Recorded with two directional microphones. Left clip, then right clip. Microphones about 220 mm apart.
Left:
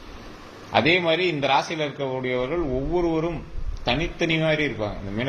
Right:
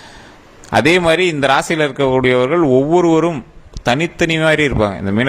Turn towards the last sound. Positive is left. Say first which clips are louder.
# right 12 dB
turn(degrees=-50)  # may be behind; listen again after turning